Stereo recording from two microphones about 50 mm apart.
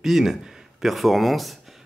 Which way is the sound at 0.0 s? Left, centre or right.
Centre.